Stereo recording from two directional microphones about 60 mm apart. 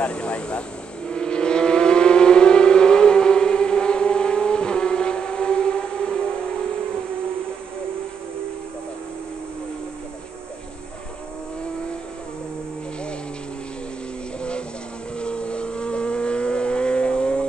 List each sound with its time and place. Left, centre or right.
0.0 s speech: left
1.1 s vehicle: centre
15.1 s vehicle: centre